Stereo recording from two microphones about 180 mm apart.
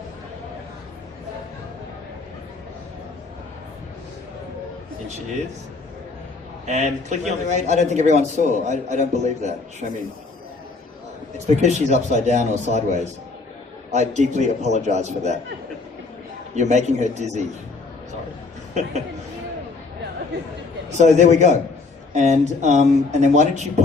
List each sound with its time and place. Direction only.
6.7 s a man's voice: 40° right (ahead or behind)
11.3 s a man's voice: 40° right (ahead or behind)
16.6 s a man's voice: 40° right (ahead or behind)
18.7 s a man's voice: 40° right (ahead or behind)
20.9 s a man's voice: 40° right (ahead or behind)